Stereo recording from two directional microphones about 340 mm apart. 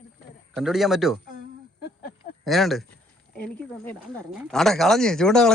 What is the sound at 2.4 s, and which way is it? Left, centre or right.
Speech, centre.